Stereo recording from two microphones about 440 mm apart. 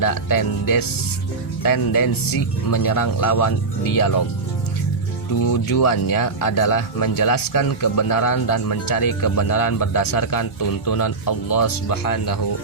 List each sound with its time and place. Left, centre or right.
0.0 s speech: left
5.4 s speech: left